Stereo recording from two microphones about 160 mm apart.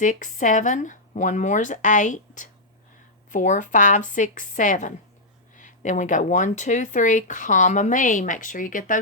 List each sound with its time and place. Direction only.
0.0 s speech: 55° left (ahead or behind)